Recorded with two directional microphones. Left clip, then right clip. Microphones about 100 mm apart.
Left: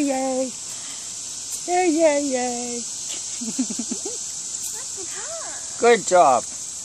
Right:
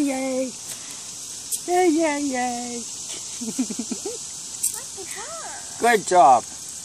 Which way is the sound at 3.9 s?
15° left (ahead or behind).